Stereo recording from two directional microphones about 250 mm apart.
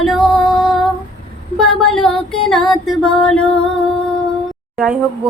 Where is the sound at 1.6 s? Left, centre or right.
Centre.